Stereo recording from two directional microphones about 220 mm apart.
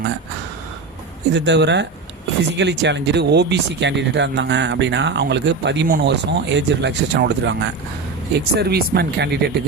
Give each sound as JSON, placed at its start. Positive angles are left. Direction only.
{"t": 1.3, "sound": "speech", "side_deg": -50}